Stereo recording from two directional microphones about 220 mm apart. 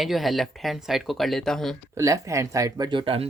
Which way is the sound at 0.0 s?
Centre (ahead or behind).